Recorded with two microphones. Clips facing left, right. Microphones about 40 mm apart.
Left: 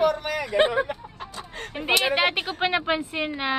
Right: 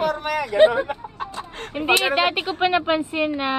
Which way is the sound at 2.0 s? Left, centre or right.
Centre.